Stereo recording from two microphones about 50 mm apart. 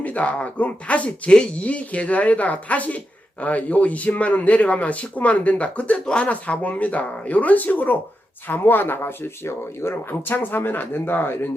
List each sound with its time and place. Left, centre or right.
0.0 s speech: left